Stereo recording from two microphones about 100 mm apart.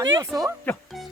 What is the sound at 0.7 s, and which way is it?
Speech, 20° left (ahead or behind).